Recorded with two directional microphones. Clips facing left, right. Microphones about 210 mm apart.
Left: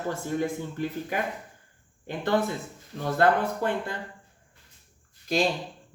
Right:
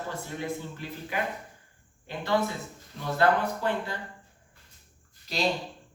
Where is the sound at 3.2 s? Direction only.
50° left (ahead or behind).